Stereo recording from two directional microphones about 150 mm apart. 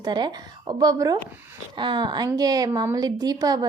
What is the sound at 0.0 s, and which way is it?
A woman's voice, 30° right (ahead or behind).